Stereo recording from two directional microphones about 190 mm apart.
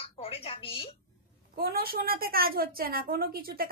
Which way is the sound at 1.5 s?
55° right (ahead or behind).